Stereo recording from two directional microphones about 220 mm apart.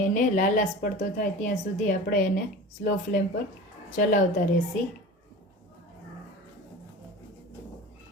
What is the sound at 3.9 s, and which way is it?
Speech, 35° left (ahead or behind).